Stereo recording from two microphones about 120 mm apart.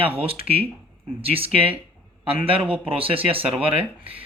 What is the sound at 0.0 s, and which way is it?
Speech, 50° right (ahead or behind).